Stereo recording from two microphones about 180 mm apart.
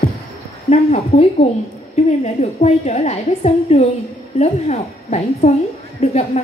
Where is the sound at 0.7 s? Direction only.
35° left (ahead or behind).